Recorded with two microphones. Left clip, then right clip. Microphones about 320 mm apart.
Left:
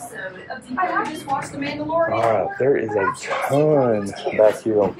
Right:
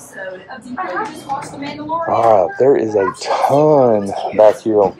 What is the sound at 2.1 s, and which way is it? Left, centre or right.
Speech, centre.